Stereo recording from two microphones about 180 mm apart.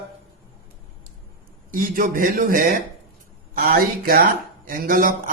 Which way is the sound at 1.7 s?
50° right (ahead or behind).